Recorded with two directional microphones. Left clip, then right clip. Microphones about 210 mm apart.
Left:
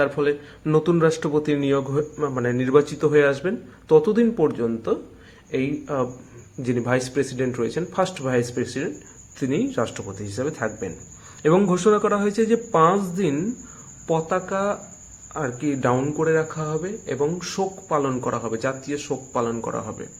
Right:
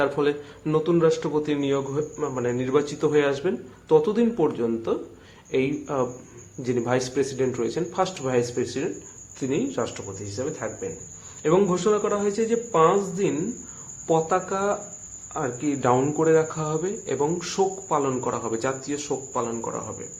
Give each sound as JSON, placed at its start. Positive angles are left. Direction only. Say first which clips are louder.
{"t": 0.0, "sound": "speech", "louder": "left 2 dB", "side_deg": 0}
{"t": 0.7, "sound": "speech", "louder": "left 1 dB", "side_deg": 20}
{"t": 5.5, "sound": "speech", "louder": "even", "side_deg": 0}
{"t": 6.6, "sound": "speech", "louder": "left 1 dB", "side_deg": 10}
{"t": 14.1, "sound": "speech", "louder": "even", "side_deg": 5}